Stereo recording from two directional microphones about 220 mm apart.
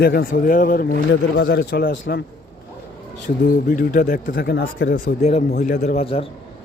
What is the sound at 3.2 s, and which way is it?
Speech, 40° left (ahead or behind).